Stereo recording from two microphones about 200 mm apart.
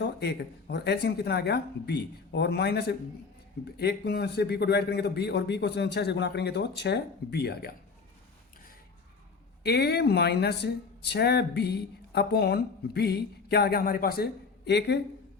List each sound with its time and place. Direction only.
0.0 s speech: 55° left (ahead or behind)
9.6 s speech: 55° left (ahead or behind)